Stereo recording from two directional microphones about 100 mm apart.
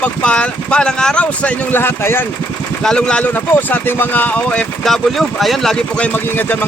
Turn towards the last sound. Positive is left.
turn(degrees=20)  # may be behind; listen again after turning